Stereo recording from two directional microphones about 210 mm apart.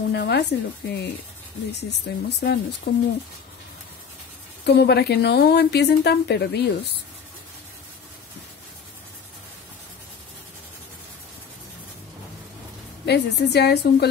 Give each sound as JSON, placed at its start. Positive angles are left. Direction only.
{"t": 0.1, "sound": "a woman's voice", "side_deg": 55}
{"t": 4.6, "sound": "a woman's voice", "side_deg": 50}
{"t": 13.0, "sound": "a woman's voice", "side_deg": 50}